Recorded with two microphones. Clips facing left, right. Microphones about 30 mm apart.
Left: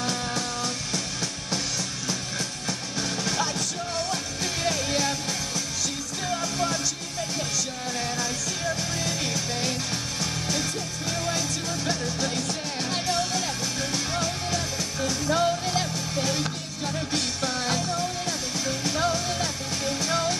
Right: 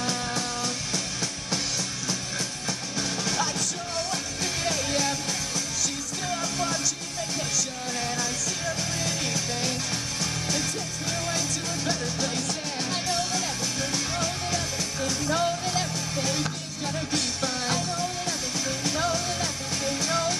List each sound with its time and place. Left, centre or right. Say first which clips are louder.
4.6 s music: left 1 dB; centre
6.2 s music: left 2 dB; centre
8.0 s music: even; centre
12.9 s music: left 2 dB; centre
18.9 s music: left 1 dB; centre